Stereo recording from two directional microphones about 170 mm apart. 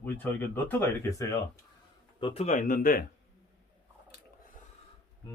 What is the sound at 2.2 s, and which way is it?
Speech, 30° left (ahead or behind).